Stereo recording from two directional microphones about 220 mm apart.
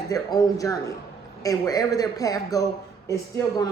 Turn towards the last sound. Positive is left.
turn(degrees=15)  # may be behind; listen again after turning